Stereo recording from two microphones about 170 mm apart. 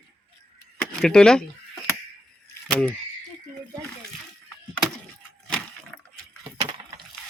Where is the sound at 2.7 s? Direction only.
5° left (ahead or behind).